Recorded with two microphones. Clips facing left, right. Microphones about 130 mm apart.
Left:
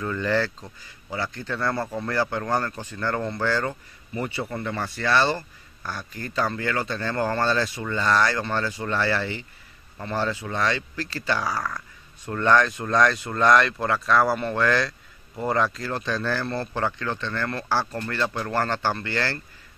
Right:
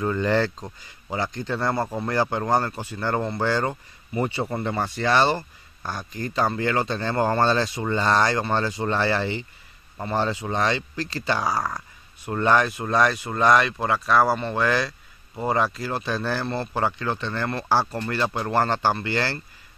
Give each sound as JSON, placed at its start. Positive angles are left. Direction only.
{"t": 0.0, "sound": "speech", "side_deg": -25}